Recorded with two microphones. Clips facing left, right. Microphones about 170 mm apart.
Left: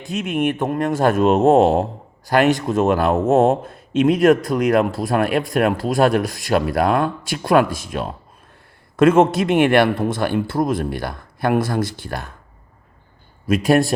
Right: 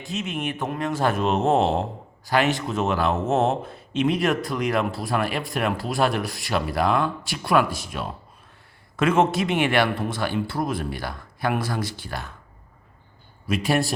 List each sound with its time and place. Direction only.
0.1 s a man's voice: 55° left (ahead or behind)
13.5 s a man's voice: 50° left (ahead or behind)